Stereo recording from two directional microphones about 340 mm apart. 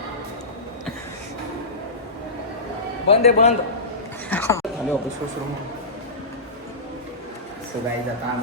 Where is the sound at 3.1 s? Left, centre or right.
Centre.